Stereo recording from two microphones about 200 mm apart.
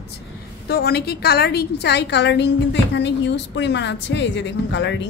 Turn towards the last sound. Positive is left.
turn(degrees=65)  # may be behind; listen again after turning